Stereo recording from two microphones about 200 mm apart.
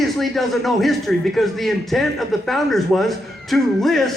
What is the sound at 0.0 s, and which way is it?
A man's voice, centre (ahead or behind).